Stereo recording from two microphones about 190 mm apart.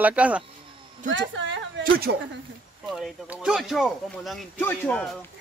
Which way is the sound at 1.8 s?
55° right (ahead or behind).